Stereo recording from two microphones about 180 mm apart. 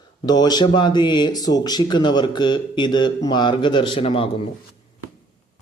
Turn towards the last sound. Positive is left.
turn(degrees=30)  # may be behind; listen again after turning